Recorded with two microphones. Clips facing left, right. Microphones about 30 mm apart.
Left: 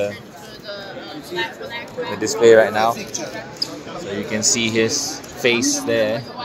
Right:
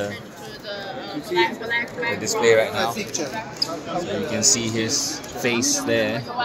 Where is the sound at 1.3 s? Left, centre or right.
Centre.